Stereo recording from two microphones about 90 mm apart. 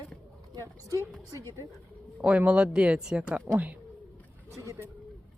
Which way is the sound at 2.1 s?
15° right (ahead or behind).